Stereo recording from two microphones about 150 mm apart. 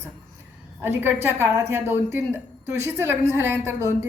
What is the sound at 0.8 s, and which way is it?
A woman's voice, 15° right (ahead or behind).